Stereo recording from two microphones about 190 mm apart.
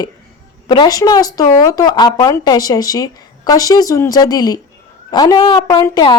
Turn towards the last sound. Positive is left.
turn(degrees=20)  # may be behind; listen again after turning